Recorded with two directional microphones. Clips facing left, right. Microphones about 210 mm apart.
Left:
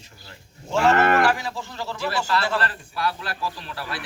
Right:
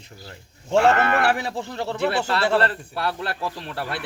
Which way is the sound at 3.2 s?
60° right (ahead or behind).